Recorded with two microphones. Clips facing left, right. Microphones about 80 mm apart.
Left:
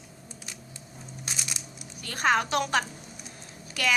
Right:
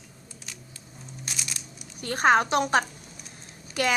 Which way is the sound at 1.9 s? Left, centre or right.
Right.